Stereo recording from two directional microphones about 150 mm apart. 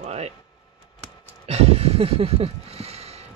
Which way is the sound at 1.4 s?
45° right (ahead or behind).